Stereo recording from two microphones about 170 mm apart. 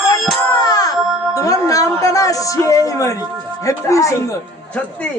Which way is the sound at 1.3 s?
20° left (ahead or behind).